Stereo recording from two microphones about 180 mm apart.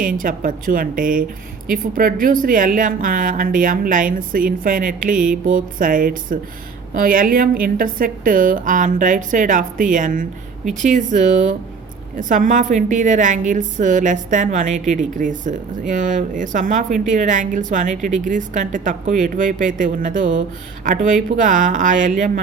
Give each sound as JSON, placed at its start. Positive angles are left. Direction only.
{"t": 0.2, "sound": "a woman's voice", "side_deg": -50}